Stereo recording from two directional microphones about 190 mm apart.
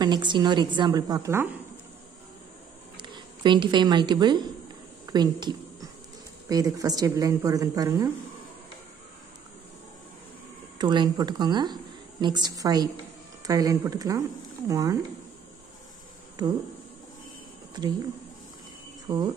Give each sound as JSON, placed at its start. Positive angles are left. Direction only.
{"t": 0.0, "sound": "speech", "side_deg": -25}
{"t": 3.0, "sound": "speech", "side_deg": -25}
{"t": 10.8, "sound": "a woman's voice", "side_deg": -25}
{"t": 19.1, "sound": "speech", "side_deg": -25}